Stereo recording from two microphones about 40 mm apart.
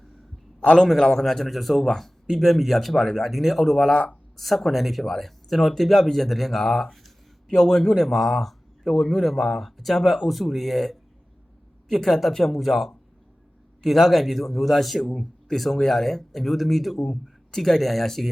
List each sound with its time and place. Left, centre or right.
0.6 s a man's voice: left
0.9 s speech: centre
3.3 s speech: centre
3.9 s speech: left
4.4 s speech: centre